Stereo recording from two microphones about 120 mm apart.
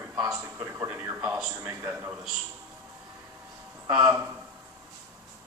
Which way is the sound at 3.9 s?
30° right (ahead or behind).